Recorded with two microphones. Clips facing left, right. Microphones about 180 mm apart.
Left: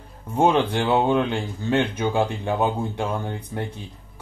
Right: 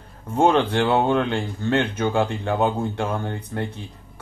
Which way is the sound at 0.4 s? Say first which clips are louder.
Right 1 dB; 15° left (ahead or behind).